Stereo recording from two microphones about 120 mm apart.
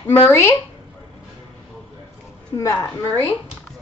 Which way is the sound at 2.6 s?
20° left (ahead or behind).